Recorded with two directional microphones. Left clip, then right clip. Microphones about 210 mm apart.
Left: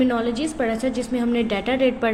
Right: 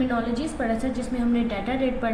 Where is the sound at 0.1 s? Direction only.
45° left (ahead or behind).